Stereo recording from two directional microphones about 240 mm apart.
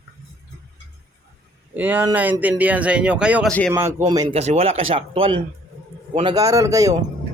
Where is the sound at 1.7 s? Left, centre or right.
Centre.